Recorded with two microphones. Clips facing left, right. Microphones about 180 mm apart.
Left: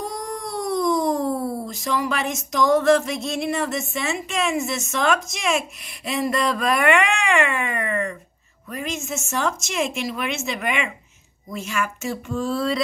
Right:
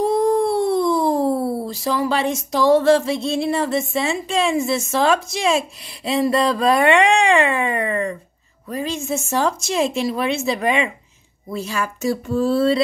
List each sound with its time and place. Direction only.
0.0 s speech: 30° right (ahead or behind)